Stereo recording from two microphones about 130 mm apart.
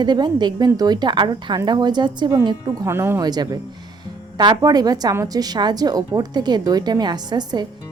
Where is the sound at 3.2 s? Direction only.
30° right (ahead or behind).